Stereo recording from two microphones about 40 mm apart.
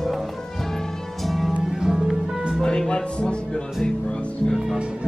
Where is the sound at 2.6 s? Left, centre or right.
Left.